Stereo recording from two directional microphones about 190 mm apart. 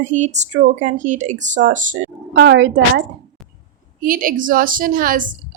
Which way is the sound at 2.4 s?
75° right (ahead or behind).